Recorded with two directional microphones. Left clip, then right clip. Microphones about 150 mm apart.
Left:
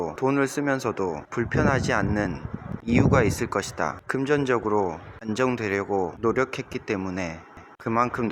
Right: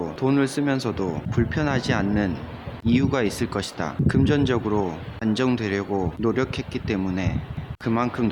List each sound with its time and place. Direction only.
0.0 s speech: 30° left (ahead or behind)